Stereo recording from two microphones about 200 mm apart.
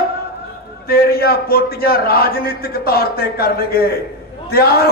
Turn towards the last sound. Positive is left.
turn(degrees=50)  # may be behind; listen again after turning